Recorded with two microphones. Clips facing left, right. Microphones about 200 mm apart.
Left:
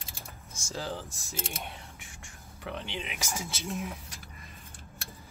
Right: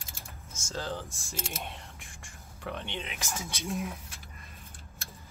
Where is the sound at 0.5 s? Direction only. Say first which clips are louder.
Even; 15° left (ahead or behind).